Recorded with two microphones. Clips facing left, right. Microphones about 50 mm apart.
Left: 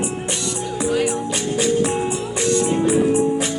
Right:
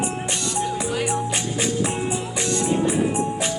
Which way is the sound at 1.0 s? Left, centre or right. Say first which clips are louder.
Left 2 dB; right.